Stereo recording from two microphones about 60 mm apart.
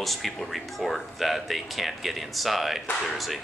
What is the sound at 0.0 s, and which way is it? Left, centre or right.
Speech, centre.